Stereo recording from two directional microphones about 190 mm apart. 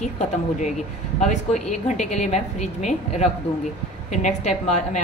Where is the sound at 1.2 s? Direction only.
40° left (ahead or behind).